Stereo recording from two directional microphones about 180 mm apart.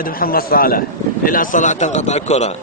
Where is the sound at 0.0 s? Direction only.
55° left (ahead or behind); by 2.5 s 40° left (ahead or behind).